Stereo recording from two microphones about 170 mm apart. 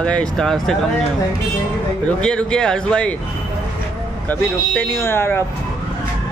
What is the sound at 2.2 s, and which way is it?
Speech, 5° left (ahead or behind).